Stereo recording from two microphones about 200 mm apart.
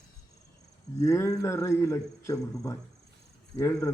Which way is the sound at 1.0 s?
15° left (ahead or behind).